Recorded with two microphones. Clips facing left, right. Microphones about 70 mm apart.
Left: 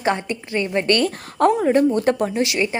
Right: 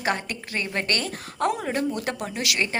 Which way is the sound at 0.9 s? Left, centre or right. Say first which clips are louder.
Left 9 dB; left.